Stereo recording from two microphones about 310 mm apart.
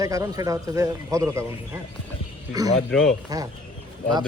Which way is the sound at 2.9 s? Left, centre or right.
Centre.